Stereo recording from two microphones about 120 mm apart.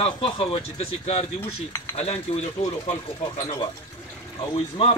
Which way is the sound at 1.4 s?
20° left (ahead or behind).